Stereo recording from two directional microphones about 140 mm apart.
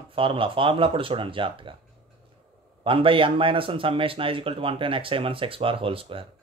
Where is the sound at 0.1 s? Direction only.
40° right (ahead or behind).